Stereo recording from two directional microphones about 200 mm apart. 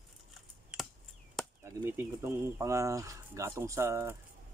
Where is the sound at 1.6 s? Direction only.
10° right (ahead or behind).